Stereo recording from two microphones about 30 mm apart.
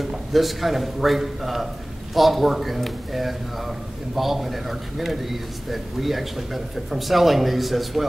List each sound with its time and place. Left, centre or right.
0.3 s a man's voice: centre